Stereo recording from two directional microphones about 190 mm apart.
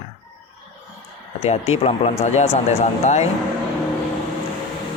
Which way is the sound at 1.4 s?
35° left (ahead or behind).